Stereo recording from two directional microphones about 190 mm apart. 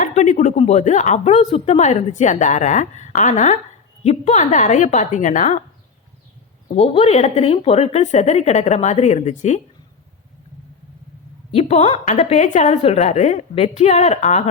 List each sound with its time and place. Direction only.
0.0 s a woman's voice: 40° left (ahead or behind)
6.7 s a woman's voice: 30° left (ahead or behind)
11.5 s a woman's voice: 35° left (ahead or behind)